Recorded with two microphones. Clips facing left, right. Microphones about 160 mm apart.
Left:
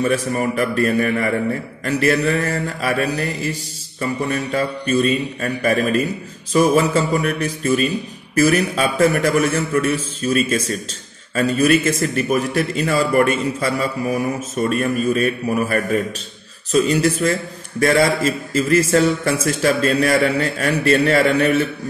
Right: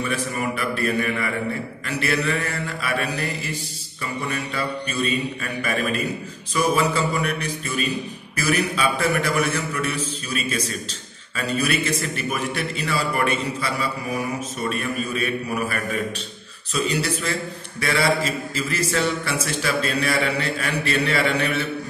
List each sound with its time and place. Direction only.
0.0 s a man's voice: 40° left (ahead or behind)